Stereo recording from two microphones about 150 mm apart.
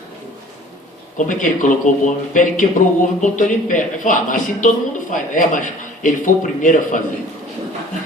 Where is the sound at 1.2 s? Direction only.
60° left (ahead or behind).